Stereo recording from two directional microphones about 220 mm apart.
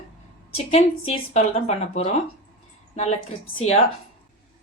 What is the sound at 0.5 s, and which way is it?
A woman's voice, 30° left (ahead or behind).